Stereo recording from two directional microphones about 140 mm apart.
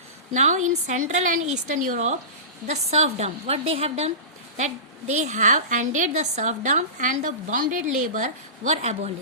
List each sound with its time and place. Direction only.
0.3 s a woman's voice: 60° right (ahead or behind)
2.6 s a woman's voice: 50° right (ahead or behind)